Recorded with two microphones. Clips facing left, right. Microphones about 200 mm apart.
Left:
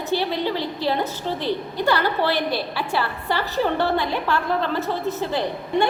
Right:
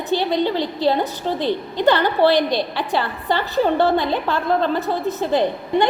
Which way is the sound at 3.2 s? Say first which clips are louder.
Right 5 dB; 15° right (ahead or behind).